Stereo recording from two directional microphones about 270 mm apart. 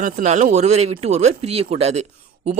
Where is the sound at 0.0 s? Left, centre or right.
Right.